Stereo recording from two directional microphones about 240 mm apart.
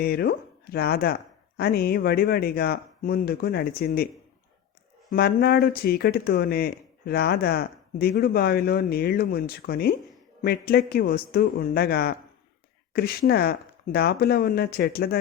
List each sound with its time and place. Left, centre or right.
0.0 s speech: left
5.1 s speech: left